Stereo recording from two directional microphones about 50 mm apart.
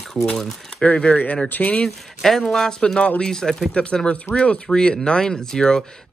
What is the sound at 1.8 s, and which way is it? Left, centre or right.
Speech, centre.